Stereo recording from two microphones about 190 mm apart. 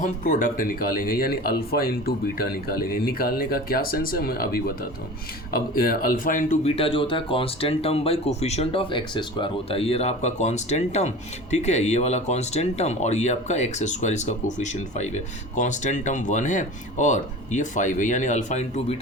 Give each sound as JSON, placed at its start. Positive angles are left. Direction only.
{"t": 0.0, "sound": "speech", "side_deg": 45}